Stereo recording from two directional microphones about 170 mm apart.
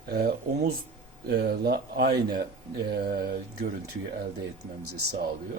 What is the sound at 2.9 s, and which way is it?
Mantra, 60° right (ahead or behind).